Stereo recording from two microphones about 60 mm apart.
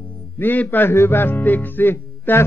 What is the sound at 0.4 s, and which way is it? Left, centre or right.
Speech, left.